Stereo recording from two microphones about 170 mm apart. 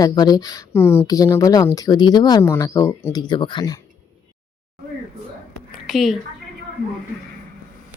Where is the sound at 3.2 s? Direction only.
25° left (ahead or behind).